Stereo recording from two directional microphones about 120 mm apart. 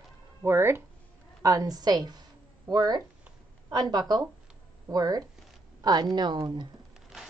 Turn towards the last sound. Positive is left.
turn(degrees=-40)  # may be behind; listen again after turning